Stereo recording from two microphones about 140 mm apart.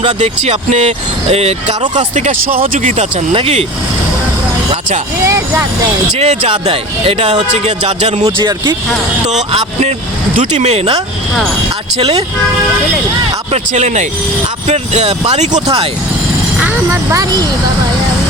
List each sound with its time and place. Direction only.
0.0 s speech: 50° right (ahead or behind)
2.0 s speech: 60° right (ahead or behind)
3.3 s speech: 45° right (ahead or behind)
5.2 s speech: 20° right (ahead or behind)
6.1 s speech: 45° right (ahead or behind)
8.4 s speech: 30° right (ahead or behind)
9.5 s speech: 45° right (ahead or behind)
11.9 s speech: 45° right (ahead or behind)
13.5 s speech: 55° right (ahead or behind)
16.6 s speech: 15° right (ahead or behind)